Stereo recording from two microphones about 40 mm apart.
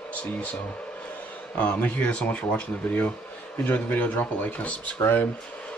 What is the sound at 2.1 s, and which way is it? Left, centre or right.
Speech, left.